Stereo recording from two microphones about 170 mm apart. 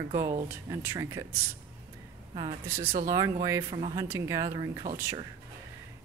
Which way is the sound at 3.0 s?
20° right (ahead or behind).